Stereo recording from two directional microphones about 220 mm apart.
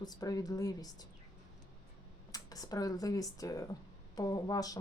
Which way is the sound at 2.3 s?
15° left (ahead or behind).